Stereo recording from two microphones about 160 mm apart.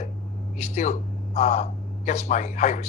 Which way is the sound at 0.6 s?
45° left (ahead or behind).